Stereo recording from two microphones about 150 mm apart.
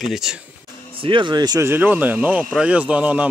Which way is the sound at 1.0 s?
35° right (ahead or behind).